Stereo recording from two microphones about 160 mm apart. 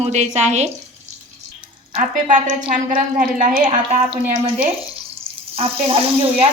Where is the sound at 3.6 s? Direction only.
40° right (ahead or behind).